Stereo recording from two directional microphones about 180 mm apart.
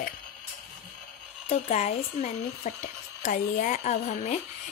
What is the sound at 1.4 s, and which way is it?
A woman's voice, 35° left (ahead or behind).